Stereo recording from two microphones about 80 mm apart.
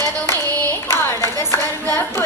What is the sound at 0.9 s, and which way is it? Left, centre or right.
Clapping, left.